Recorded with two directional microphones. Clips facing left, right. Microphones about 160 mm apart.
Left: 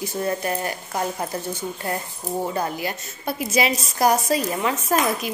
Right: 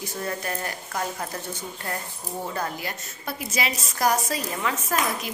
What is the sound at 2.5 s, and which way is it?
A woman's voice, 20° left (ahead or behind).